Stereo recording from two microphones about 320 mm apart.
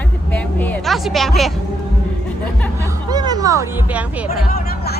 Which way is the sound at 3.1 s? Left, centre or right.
Centre.